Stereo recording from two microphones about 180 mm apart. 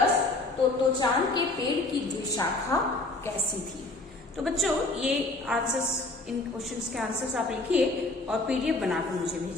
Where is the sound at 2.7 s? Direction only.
20° left (ahead or behind).